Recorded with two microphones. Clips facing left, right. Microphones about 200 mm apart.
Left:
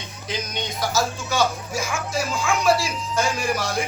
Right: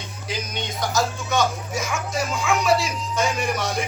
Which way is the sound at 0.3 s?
5° right (ahead or behind).